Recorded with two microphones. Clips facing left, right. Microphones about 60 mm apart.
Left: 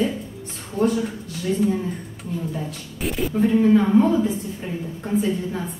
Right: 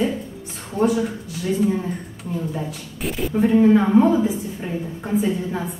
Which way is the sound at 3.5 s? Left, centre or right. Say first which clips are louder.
Right 2 dB; centre.